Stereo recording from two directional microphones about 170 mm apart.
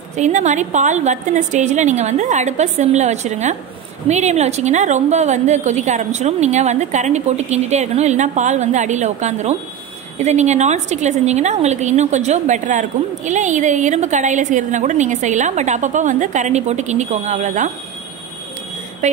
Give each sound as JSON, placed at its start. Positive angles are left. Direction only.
{"t": 0.1, "sound": "a woman's voice", "side_deg": -45}